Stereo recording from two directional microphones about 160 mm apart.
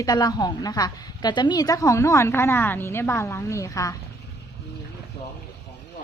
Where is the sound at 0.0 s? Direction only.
25° left (ahead or behind).